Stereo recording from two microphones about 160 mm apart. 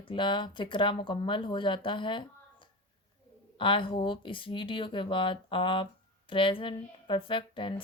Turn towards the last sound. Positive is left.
turn(degrees=30)  # may be behind; listen again after turning